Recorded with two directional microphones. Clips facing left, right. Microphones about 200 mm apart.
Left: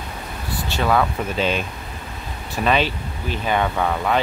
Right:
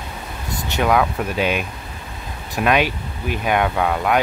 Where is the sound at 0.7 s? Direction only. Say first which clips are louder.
Right 2 dB; 10° right (ahead or behind).